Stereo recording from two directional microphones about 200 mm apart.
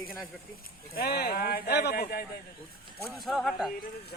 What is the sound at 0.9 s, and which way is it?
Speech, 50° left (ahead or behind).